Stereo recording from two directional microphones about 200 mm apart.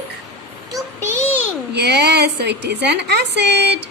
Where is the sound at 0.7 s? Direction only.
15° right (ahead or behind).